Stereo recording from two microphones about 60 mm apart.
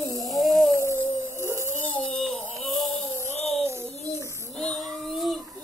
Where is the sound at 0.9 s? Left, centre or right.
Right.